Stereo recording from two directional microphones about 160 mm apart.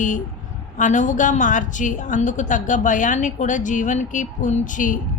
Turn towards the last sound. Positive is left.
turn(degrees=55)  # may be behind; listen again after turning